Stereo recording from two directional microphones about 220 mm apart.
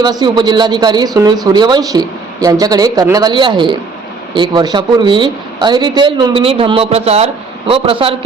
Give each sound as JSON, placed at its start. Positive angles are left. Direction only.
{"t": 0.0, "sound": "speech", "side_deg": -20}